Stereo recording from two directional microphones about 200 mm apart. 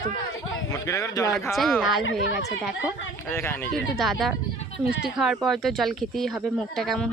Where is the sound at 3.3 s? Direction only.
10° left (ahead or behind).